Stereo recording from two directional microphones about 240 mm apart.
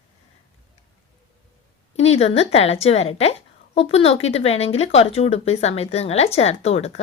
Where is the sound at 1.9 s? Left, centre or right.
Left.